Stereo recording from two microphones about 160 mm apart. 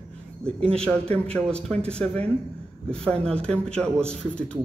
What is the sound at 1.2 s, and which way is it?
A man's voice, 5° left (ahead or behind).